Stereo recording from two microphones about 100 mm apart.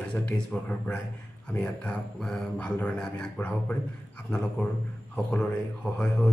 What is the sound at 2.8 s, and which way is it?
Speech, 5° left (ahead or behind).